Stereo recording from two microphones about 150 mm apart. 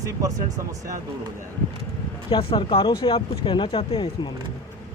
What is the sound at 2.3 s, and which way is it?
Speech, 35° left (ahead or behind).